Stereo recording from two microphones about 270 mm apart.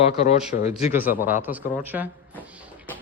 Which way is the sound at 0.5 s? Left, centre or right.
Left.